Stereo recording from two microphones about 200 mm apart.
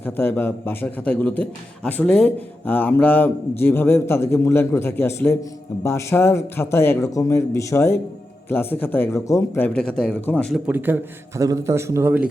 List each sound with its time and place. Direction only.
0.0 s a man's voice: 10° left (ahead or behind)
10.7 s a man's voice: 10° right (ahead or behind)